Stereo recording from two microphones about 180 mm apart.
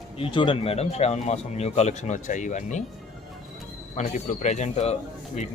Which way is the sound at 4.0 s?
40° left (ahead or behind).